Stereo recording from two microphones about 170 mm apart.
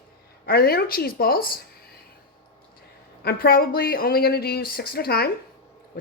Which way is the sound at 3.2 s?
60° left (ahead or behind).